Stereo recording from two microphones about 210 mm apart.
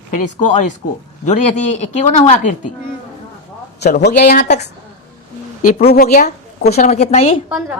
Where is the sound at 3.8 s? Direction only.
50° left (ahead or behind).